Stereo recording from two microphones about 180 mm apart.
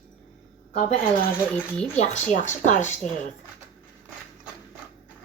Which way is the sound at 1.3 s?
10° left (ahead or behind).